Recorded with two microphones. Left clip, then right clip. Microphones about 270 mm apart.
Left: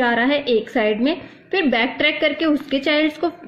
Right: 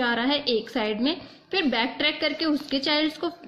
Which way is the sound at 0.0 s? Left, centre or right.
Centre.